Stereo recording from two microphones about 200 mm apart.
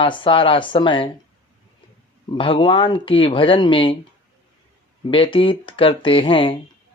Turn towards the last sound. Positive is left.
turn(degrees=25)  # may be behind; listen again after turning